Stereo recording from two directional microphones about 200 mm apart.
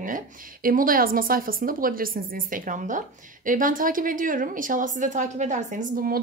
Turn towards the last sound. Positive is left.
turn(degrees=-45)  # may be behind; listen again after turning